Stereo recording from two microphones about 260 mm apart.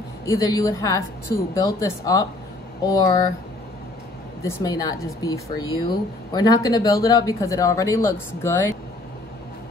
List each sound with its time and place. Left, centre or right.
0.2 s speech: centre
4.4 s speech: centre